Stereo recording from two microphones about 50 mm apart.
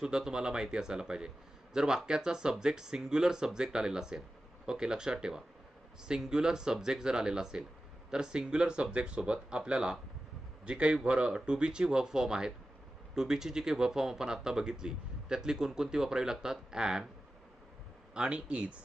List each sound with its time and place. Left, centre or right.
0.0 s speech: centre
18.1 s speech: centre